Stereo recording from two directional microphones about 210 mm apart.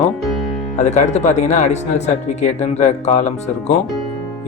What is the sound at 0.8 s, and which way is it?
Speech, 35° left (ahead or behind).